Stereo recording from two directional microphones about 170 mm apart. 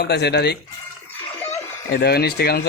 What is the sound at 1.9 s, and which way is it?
Speech, 70° left (ahead or behind).